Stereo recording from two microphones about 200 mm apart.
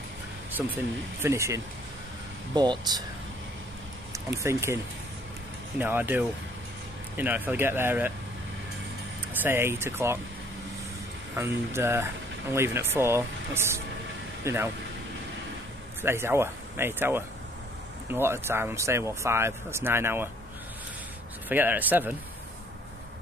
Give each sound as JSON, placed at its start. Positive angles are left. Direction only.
{"t": 0.6, "sound": "speech", "side_deg": -5}
{"t": 4.1, "sound": "speech", "side_deg": -15}
{"t": 5.8, "sound": "speech", "side_deg": -10}
{"t": 9.4, "sound": "speech", "side_deg": -10}
{"t": 11.3, "sound": "speech", "side_deg": -15}
{"t": 16.0, "sound": "speech", "side_deg": -10}
{"t": 21.5, "sound": "speech", "side_deg": -10}